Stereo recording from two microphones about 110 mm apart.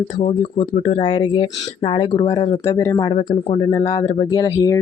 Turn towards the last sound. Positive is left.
turn(degrees=30)  # may be behind; listen again after turning